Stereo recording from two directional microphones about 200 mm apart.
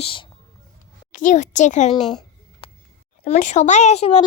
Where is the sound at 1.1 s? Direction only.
40° left (ahead or behind).